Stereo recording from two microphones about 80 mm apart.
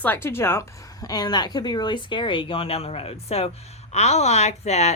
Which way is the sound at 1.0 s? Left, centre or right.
Left.